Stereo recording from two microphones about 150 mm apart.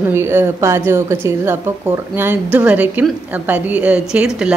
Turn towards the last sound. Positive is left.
turn(degrees=-5)  # may be behind; listen again after turning